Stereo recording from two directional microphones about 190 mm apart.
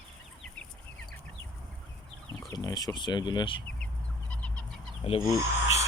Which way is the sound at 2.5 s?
20° left (ahead or behind).